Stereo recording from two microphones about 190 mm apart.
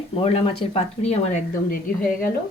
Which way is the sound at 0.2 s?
30° left (ahead or behind).